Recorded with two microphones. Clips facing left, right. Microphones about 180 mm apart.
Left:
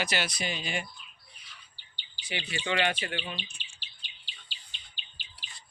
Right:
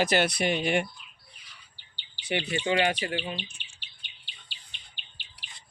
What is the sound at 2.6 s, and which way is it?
Speech, 35° right (ahead or behind).